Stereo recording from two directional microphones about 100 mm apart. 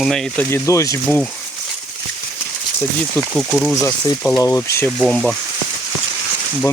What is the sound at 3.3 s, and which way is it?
Speech, 5° left (ahead or behind).